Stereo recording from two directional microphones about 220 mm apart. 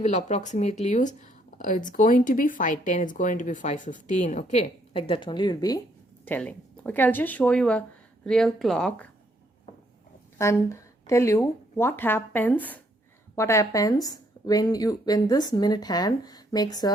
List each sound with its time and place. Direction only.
0.0 s speech: 30° left (ahead or behind); by 9.0 s centre (ahead or behind)
10.3 s speech: 10° left (ahead or behind)